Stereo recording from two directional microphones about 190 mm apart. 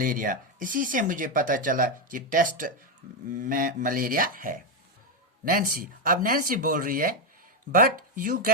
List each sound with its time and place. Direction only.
0.0 s speech: 45° right (ahead or behind)